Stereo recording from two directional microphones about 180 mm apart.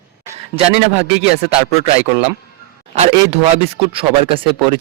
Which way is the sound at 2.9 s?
40° right (ahead or behind).